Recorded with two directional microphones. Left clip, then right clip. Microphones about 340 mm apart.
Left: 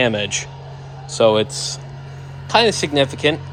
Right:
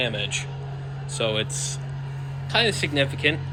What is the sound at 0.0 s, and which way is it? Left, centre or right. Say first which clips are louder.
Speech: left 8 dB; left.